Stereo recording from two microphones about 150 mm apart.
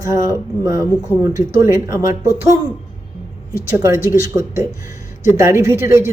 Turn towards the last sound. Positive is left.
turn(degrees=-15)  # may be behind; listen again after turning